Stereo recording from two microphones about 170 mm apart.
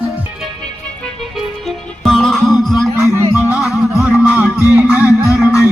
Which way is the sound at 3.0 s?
15° right (ahead or behind).